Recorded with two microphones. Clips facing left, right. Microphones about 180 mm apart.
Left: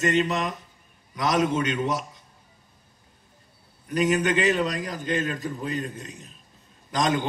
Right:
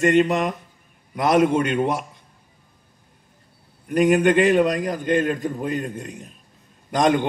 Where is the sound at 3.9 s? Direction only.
55° right (ahead or behind).